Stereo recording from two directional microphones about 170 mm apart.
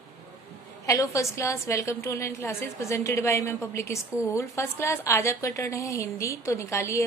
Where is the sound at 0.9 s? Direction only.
20° left (ahead or behind).